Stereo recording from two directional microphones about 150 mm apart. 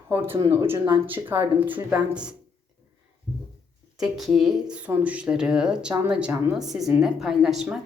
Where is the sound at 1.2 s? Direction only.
30° right (ahead or behind).